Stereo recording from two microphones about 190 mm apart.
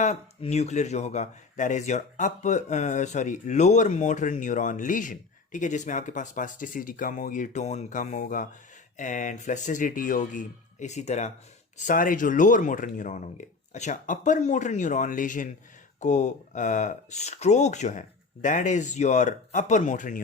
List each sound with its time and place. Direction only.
0.0 s speech: 35° left (ahead or behind)